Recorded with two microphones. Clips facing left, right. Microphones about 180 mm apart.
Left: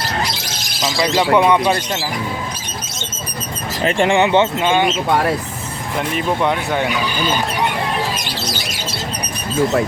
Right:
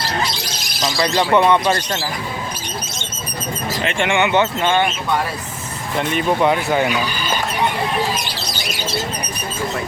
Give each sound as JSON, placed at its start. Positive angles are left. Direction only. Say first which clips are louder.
{"t": 0.8, "sound": "speech", "louder": "left 1 dB", "side_deg": 5}
{"t": 3.8, "sound": "speech", "louder": "left 5 dB", "side_deg": 35}
{"t": 4.6, "sound": "speech", "louder": "left 1 dB", "side_deg": 15}
{"t": 6.0, "sound": "speech", "louder": "right 2 dB", "side_deg": 0}